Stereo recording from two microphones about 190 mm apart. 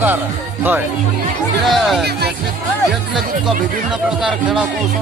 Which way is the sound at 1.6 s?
Centre (ahead or behind).